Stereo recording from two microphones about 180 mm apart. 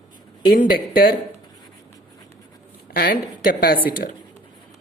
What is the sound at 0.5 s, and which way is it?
Speech, 55° left (ahead or behind).